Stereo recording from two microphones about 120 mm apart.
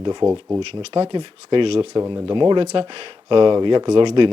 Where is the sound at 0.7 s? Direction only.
50° right (ahead or behind).